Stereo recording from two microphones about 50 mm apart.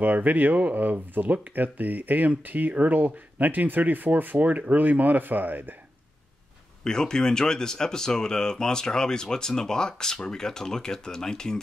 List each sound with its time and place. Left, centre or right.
0.0 s speech: right
6.8 s speech: centre